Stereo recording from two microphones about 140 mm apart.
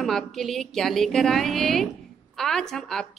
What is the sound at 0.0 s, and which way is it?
A woman's voice, centre (ahead or behind).